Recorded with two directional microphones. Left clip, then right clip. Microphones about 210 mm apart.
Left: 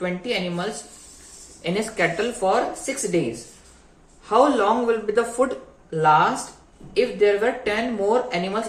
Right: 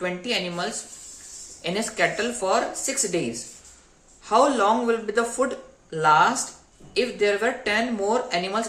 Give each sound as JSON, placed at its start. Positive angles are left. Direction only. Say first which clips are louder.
{"t": 0.0, "sound": "speech", "louder": "left 1 dB", "side_deg": -15}
{"t": 4.3, "sound": "speech", "louder": "left 1 dB", "side_deg": -15}